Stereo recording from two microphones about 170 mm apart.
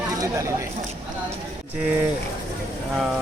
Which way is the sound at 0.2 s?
15° right (ahead or behind).